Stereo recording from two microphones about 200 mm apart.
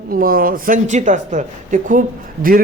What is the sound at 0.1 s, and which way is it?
Speech, 45° right (ahead or behind).